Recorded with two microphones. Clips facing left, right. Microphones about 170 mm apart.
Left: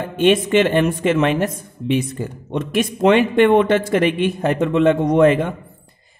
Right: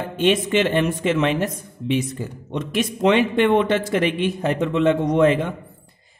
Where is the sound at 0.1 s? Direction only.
55° left (ahead or behind).